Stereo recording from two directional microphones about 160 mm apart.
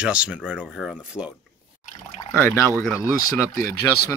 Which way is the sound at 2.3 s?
15° left (ahead or behind).